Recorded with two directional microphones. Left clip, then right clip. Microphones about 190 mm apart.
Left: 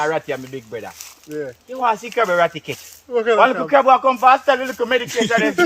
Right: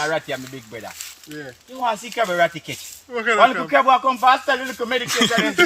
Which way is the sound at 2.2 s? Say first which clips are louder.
Left 2 dB; 25° left (ahead or behind).